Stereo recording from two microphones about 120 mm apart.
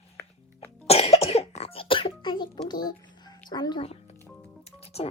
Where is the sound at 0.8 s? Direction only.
60° left (ahead or behind); by 2.6 s 40° left (ahead or behind).